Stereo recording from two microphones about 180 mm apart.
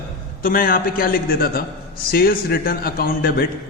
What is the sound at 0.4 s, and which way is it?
A man's voice, 50° left (ahead or behind).